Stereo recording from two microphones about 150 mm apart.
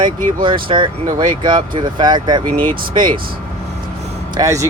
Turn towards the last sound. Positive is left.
turn(degrees=-20)  # may be behind; listen again after turning